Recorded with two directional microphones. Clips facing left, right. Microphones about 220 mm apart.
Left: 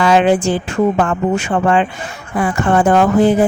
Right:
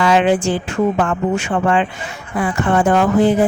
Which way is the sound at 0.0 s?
45° left (ahead or behind).